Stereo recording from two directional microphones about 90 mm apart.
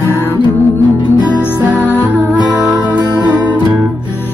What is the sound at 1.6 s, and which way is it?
Music, 20° right (ahead or behind).